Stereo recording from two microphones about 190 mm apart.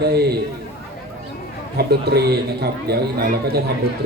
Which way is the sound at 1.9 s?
60° right (ahead or behind).